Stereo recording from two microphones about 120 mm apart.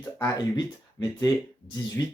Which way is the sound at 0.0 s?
35° left (ahead or behind).